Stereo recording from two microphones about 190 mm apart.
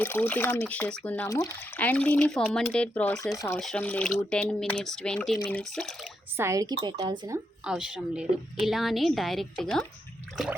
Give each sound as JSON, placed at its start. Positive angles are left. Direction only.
{"t": 0.0, "sound": "speech", "side_deg": 10}
{"t": 6.3, "sound": "a woman's voice", "side_deg": -15}
{"t": 7.6, "sound": "speech", "side_deg": -5}